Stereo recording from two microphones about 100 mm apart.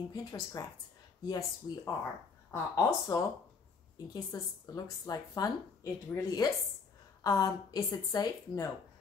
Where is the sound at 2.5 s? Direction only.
35° left (ahead or behind).